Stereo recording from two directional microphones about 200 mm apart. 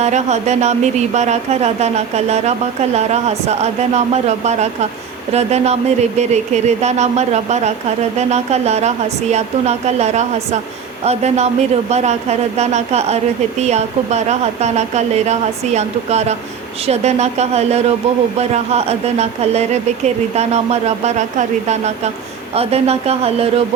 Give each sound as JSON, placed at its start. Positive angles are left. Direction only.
{"t": 0.0, "sound": "speech", "side_deg": -35}